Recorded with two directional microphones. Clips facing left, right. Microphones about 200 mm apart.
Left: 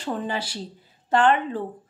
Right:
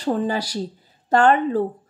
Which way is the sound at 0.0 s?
40° right (ahead or behind).